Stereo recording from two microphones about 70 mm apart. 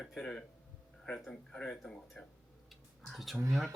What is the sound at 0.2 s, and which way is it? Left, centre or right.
Speech, centre.